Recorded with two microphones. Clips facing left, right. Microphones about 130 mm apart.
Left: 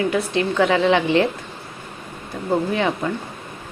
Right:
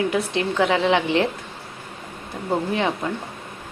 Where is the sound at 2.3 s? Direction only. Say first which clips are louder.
Left 3 dB; 15° right (ahead or behind).